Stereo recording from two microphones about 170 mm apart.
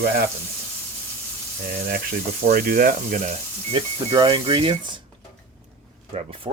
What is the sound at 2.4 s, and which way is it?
Speech, 60° right (ahead or behind).